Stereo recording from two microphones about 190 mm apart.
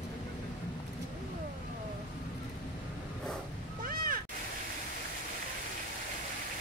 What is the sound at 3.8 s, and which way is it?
Cat, 50° right (ahead or behind).